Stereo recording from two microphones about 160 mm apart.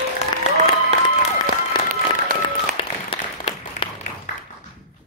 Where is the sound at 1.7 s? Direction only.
30° left (ahead or behind).